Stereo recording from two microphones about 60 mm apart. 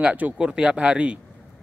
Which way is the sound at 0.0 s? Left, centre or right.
Centre.